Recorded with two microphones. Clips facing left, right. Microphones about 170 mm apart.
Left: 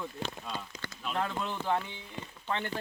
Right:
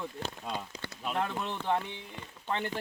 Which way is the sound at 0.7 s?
30° right (ahead or behind).